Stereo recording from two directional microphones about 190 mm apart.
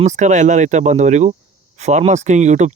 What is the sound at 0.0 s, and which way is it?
Speech, 40° right (ahead or behind).